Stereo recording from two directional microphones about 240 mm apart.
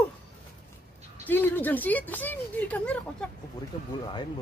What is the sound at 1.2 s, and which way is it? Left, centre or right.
Speech, centre.